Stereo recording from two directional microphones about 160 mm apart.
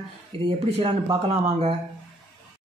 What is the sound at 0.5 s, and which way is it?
Speech, 40° right (ahead or behind).